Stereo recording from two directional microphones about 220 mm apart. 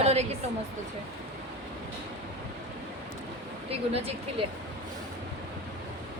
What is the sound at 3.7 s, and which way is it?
Speech, 25° right (ahead or behind).